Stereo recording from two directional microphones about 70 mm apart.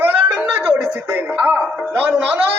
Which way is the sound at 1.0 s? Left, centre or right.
Right.